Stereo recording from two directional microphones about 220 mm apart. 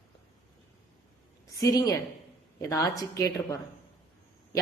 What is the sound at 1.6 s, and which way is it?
A woman's voice, 15° left (ahead or behind).